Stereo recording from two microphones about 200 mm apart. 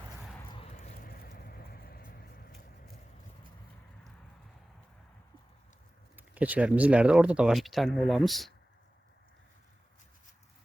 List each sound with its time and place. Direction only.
0.5 s horse: 30° left (ahead or behind)
1.0 s vehicle: 45° left (ahead or behind)
6.1 s speech: 10° right (ahead or behind)